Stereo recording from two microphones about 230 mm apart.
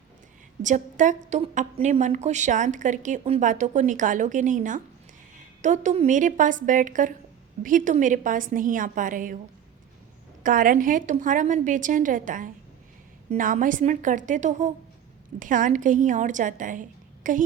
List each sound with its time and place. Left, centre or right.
0.6 s a woman's voice: right
10.4 s a woman's voice: right